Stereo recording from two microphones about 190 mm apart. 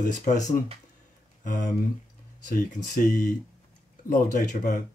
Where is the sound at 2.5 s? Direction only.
45° left (ahead or behind).